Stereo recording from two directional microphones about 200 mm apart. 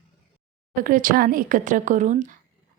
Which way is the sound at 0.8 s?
40° right (ahead or behind).